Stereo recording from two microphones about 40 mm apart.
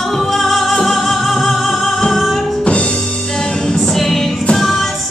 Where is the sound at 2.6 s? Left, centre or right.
Left.